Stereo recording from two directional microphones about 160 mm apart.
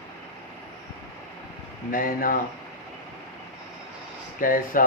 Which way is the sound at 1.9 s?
60° left (ahead or behind).